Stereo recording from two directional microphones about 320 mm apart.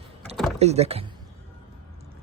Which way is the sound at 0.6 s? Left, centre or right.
Centre.